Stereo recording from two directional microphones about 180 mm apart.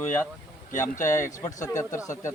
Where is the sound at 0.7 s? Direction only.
45° left (ahead or behind).